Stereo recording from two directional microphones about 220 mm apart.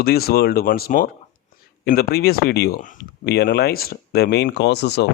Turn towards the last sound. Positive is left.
turn(degrees=50)  # may be behind; listen again after turning